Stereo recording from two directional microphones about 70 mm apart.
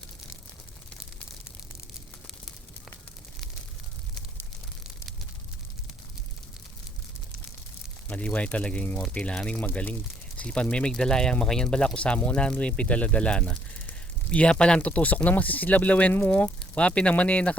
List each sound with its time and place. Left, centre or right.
8.0 s speech: centre
16.6 s speech: centre